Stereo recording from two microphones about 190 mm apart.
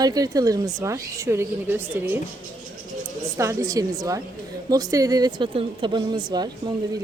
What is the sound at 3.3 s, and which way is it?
A woman's voice, 15° right (ahead or behind).